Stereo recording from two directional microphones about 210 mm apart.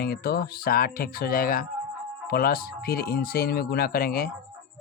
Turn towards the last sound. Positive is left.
turn(degrees=45)  # may be behind; listen again after turning